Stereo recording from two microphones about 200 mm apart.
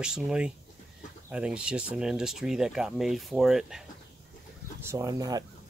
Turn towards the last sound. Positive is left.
turn(degrees=-20)  # may be behind; listen again after turning